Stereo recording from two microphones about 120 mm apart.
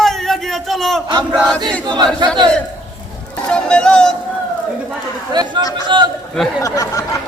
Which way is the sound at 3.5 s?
5° left (ahead or behind).